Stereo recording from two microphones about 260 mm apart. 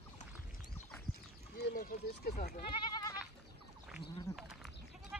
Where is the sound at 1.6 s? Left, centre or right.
Left.